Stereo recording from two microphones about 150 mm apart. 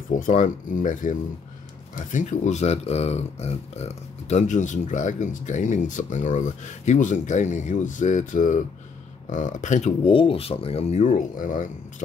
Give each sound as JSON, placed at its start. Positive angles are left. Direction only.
{"t": 0.1, "sound": "speech", "side_deg": 60}
{"t": 10.0, "sound": "speech", "side_deg": 40}